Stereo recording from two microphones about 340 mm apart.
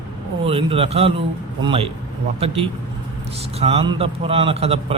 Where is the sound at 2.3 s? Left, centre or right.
Centre.